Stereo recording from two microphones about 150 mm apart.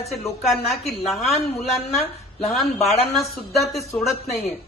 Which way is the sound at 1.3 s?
45° left (ahead or behind).